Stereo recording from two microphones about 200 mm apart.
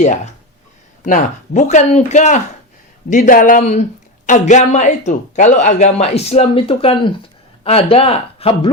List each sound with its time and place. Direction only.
1.0 s a man's voice: 40° left (ahead or behind)